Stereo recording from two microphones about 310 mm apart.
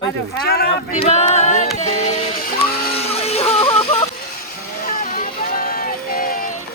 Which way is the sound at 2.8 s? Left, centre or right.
Left.